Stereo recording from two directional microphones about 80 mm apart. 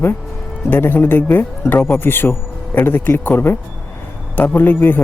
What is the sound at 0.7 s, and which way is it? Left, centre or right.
Speech, left.